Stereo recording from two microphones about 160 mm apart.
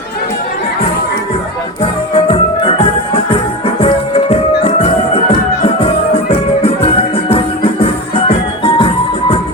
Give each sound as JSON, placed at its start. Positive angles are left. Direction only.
{"t": 2.1, "sound": "music", "side_deg": 35}